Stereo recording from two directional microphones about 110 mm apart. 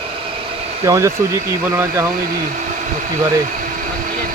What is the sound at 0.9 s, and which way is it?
Speech, 25° right (ahead or behind).